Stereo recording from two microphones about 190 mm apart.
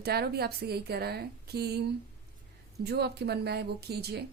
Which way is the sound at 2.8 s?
60° right (ahead or behind).